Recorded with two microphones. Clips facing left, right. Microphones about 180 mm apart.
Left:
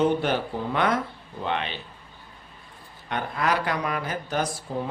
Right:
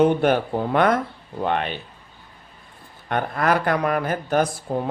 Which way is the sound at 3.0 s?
50° right (ahead or behind).